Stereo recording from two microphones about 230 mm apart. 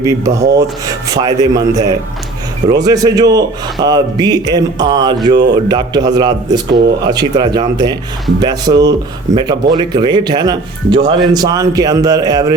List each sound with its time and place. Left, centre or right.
0.0 s speech: centre